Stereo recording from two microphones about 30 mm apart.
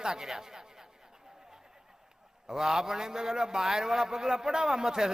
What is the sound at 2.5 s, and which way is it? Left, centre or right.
A man's voice, centre.